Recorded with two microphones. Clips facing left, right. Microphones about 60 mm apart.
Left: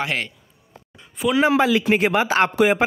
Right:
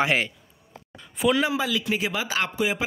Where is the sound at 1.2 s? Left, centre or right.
Centre.